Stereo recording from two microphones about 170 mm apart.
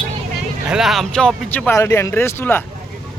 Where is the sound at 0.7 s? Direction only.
Centre (ahead or behind).